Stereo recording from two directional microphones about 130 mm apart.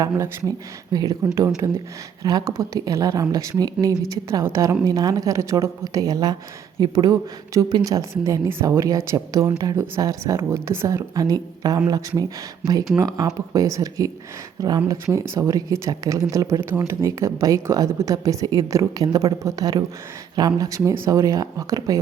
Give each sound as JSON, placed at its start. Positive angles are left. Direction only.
{"t": 0.0, "sound": "a woman's voice", "side_deg": -25}